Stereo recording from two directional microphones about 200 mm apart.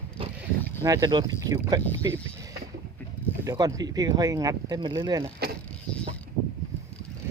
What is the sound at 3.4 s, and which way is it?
Speech, 15° right (ahead or behind).